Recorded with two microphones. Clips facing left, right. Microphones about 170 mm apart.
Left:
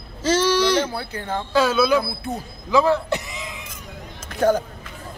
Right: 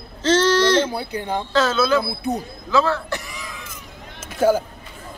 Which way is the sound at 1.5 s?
10° left (ahead or behind).